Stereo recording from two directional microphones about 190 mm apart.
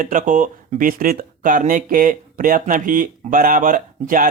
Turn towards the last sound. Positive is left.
turn(degrees=-45)  # may be behind; listen again after turning